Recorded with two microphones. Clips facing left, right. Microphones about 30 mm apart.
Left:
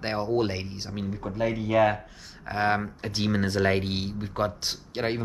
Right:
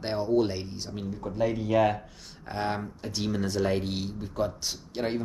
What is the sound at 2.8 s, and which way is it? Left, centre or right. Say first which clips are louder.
Speech: left 3 dB; left.